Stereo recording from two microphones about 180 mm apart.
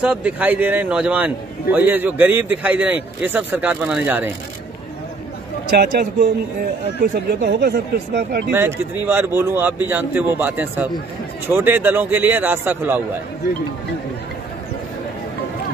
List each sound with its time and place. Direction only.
0.0 s a man's voice: 5° right (ahead or behind)
7.0 s speech: 65° right (ahead or behind)
8.5 s a man's voice: 10° right (ahead or behind)